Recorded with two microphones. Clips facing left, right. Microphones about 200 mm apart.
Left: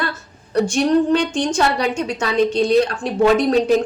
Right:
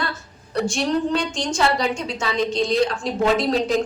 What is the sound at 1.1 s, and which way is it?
A woman's voice, 60° left (ahead or behind).